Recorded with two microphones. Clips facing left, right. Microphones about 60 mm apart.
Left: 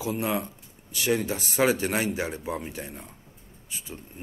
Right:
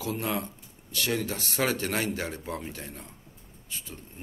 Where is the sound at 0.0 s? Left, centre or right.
Centre.